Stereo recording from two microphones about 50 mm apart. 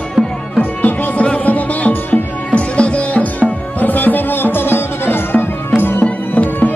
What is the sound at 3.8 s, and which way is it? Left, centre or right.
Music, left.